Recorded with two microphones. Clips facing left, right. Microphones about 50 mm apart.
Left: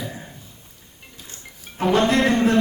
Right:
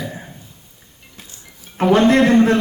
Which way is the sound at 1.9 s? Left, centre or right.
Centre.